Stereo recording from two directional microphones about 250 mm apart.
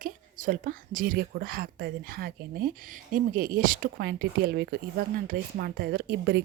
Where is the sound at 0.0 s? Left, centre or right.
Right.